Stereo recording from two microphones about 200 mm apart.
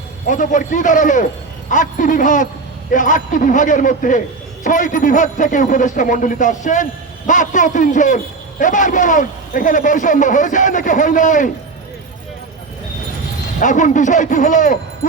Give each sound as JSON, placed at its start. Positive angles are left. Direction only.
{"t": 0.3, "sound": "a man's voice", "side_deg": 40}
{"t": 13.6, "sound": "a man's voice", "side_deg": 40}